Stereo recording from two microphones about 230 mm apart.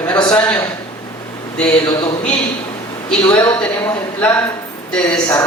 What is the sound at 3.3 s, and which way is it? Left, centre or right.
Speech, centre.